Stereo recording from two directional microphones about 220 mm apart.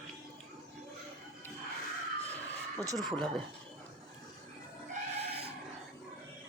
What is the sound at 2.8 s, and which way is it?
Speech, 15° right (ahead or behind).